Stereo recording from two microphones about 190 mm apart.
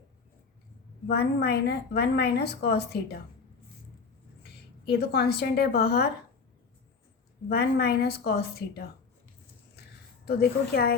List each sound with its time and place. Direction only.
1.0 s a woman's voice: 55° left (ahead or behind)
4.4 s a woman's voice: 55° left (ahead or behind)
7.4 s a woman's voice: 55° left (ahead or behind)
10.2 s a woman's voice: 55° left (ahead or behind)